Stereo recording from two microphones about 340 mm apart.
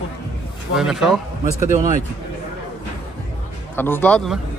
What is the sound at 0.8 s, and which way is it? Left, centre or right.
Speech, centre.